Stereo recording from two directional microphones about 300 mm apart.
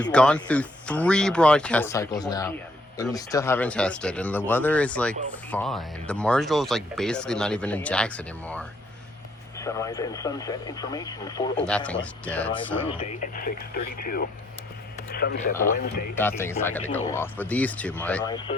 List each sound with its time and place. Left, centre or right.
0.1 s speech: centre
12.9 s speech: left
16.1 s speech: centre